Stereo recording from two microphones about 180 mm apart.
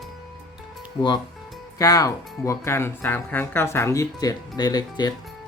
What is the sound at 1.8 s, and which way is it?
Speech, 20° left (ahead or behind).